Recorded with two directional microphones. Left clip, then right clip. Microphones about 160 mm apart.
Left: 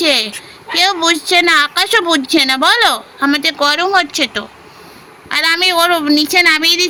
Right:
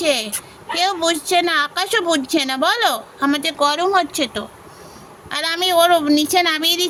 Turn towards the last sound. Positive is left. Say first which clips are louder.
# left 6 dB
turn(degrees=0)  # may be behind; listen again after turning